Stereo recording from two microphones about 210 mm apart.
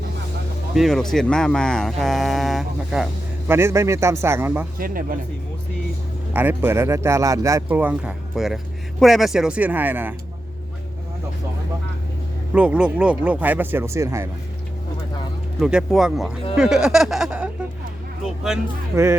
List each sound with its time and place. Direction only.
0.7 s speech: centre (ahead or behind)
4.8 s speech: 40° right (ahead or behind)
6.3 s speech: 10° right (ahead or behind)
12.5 s speech: 5° right (ahead or behind)
15.6 s speech: centre (ahead or behind)
18.9 s speech: 15° right (ahead or behind)